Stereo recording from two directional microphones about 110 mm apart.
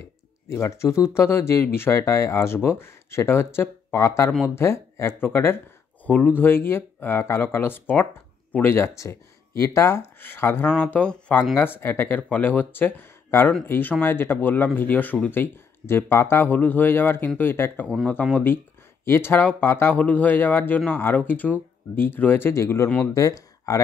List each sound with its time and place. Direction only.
0.6 s speech: 25° left (ahead or behind)